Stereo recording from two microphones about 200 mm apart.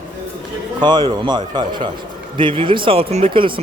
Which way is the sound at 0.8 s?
20° right (ahead or behind).